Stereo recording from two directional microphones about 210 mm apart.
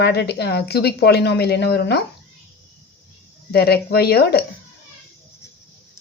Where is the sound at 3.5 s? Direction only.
50° left (ahead or behind).